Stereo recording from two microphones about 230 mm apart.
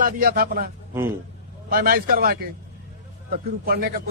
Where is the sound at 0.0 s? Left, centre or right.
Right.